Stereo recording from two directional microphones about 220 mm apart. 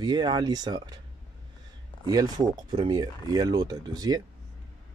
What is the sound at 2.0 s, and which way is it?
Speech, 15° right (ahead or behind).